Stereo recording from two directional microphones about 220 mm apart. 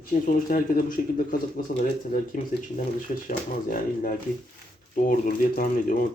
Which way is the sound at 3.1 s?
35° left (ahead or behind).